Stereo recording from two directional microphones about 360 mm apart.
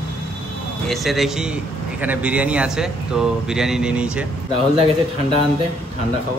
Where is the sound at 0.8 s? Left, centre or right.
Centre.